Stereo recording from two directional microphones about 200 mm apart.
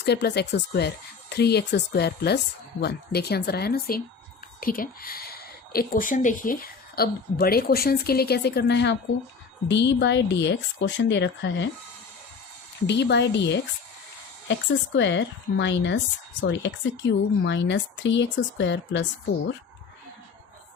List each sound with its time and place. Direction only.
0.0 s a woman's voice: 55° left (ahead or behind)
12.9 s a woman's voice: 60° left (ahead or behind)